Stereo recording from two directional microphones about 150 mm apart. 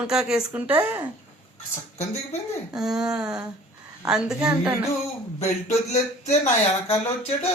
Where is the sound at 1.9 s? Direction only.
50° left (ahead or behind).